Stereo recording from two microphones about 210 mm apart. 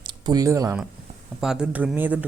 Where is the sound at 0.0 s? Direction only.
20° right (ahead or behind).